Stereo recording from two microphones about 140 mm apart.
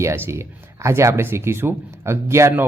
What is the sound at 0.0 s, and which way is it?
Speech, 20° right (ahead or behind).